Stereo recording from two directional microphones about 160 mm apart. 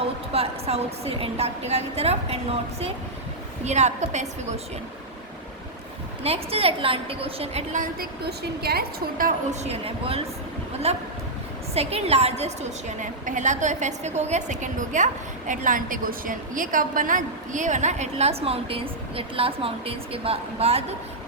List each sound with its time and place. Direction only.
0.3 s a woman's voice: 40° right (ahead or behind)
6.2 s a woman's voice: 40° right (ahead or behind)
8.2 s a woman's voice: 85° right; by 9.6 s 65° right (ahead or behind)
9.6 s a woman's voice: 35° right (ahead or behind)